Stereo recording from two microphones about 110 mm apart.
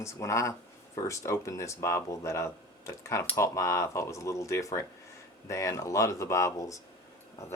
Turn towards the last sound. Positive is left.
turn(degrees=30)  # may be behind; listen again after turning